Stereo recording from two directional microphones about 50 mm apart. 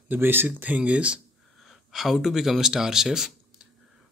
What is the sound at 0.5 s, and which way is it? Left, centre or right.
Speech, right.